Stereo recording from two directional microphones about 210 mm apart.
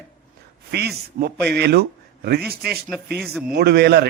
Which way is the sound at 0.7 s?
50° right (ahead or behind).